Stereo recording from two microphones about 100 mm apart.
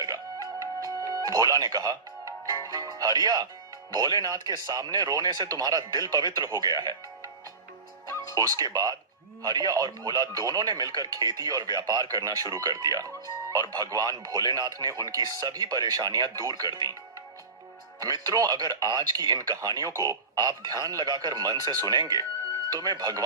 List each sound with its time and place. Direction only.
1.0 s music: 35° right (ahead or behind)
3.9 s speech: 40° right (ahead or behind)
8.3 s speech: 40° right (ahead or behind)
18.0 s speech: 40° right (ahead or behind)